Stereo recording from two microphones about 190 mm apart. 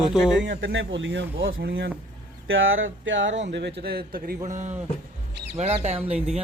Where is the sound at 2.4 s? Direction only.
90° right.